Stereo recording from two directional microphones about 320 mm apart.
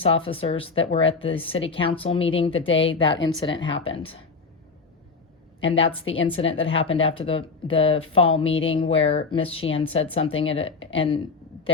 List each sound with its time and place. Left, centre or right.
0.0 s speech: centre
5.7 s speech: centre